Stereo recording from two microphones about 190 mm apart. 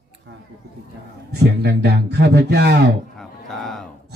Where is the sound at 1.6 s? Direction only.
60° right (ahead or behind).